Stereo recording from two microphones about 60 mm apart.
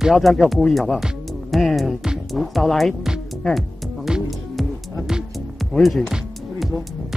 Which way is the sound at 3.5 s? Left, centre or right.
Centre.